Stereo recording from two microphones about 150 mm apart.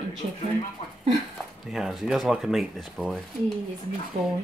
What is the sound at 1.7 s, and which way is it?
Speech, centre (ahead or behind).